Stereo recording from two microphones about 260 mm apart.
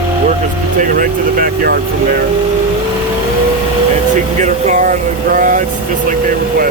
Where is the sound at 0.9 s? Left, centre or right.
Right.